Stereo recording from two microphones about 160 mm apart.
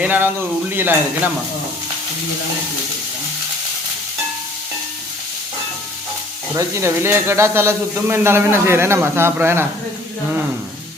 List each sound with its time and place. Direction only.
0.0 s speech: 10° right (ahead or behind)
6.6 s speech: 15° right (ahead or behind)